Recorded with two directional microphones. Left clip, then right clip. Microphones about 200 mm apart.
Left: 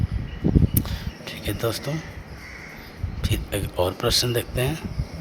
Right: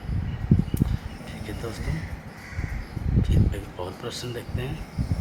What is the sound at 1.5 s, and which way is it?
Speech, 50° left (ahead or behind).